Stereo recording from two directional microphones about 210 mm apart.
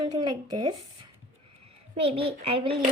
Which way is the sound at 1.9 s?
25° right (ahead or behind).